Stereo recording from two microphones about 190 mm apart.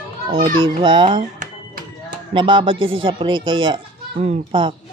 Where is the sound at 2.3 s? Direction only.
25° right (ahead or behind).